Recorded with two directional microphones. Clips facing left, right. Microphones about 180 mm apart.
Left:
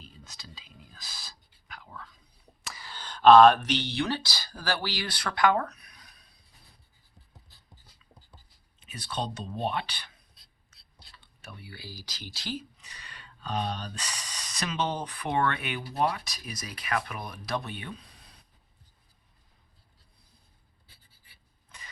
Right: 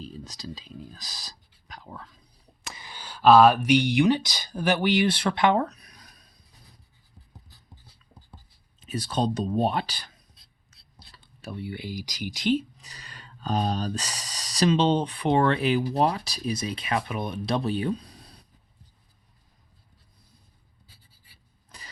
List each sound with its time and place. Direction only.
0.0 s speech: 35° right (ahead or behind)
2.7 s speech: 15° right (ahead or behind); by 6.3 s 40° right (ahead or behind)
8.8 s speech: 40° right (ahead or behind)
10.7 s whispering: 40° right (ahead or behind)
11.6 s speech: 20° right (ahead or behind)
12.7 s speech: 35° right (ahead or behind)
21.7 s engine starting: 40° right (ahead or behind)